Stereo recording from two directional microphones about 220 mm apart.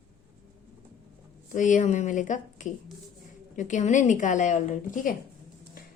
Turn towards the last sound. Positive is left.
turn(degrees=35)  # may be behind; listen again after turning